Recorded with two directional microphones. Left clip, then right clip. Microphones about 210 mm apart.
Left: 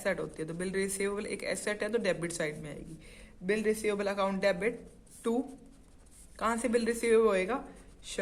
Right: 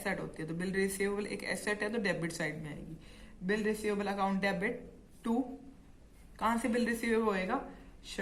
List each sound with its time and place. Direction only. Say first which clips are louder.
0.0 s a woman's voice: left 4 dB; 25° left (ahead or behind)
6.3 s a woman's voice: left 2 dB; 30° left (ahead or behind)